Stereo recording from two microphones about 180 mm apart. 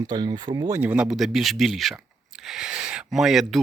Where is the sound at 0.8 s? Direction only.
5° right (ahead or behind).